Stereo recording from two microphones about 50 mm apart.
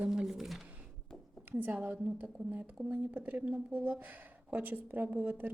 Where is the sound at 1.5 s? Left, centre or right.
Right.